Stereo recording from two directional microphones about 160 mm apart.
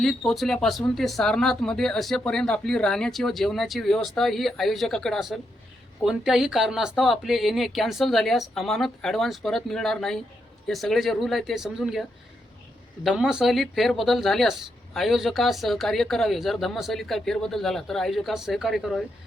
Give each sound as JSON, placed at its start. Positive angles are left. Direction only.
{"t": 0.0, "sound": "speech", "side_deg": 0}
{"t": 13.1, "sound": "speech", "side_deg": -5}